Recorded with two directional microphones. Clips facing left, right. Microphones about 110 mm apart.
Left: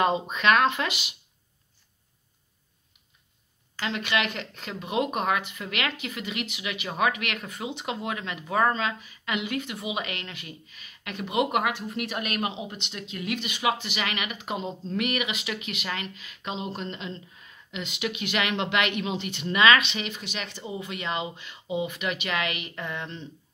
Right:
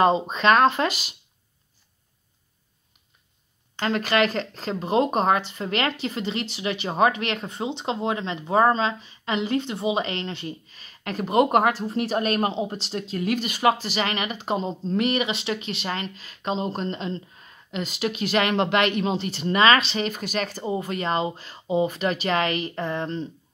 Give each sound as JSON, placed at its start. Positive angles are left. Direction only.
{"t": 0.0, "sound": "speech", "side_deg": -30}
{"t": 3.8, "sound": "speech", "side_deg": -40}